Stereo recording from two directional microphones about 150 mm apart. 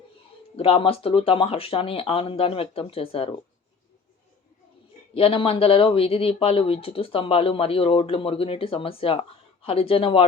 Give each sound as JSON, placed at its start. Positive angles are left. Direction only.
{"t": 0.5, "sound": "speech", "side_deg": 40}
{"t": 5.1, "sound": "speech", "side_deg": 40}